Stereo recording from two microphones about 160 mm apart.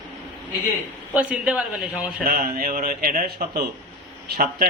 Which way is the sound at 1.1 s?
5° right (ahead or behind).